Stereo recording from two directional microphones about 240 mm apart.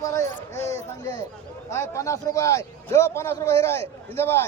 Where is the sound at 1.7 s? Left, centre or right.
Centre.